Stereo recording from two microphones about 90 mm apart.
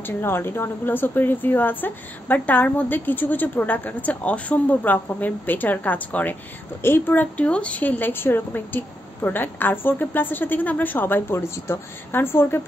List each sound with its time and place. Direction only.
0.0 s speech: 25° left (ahead or behind)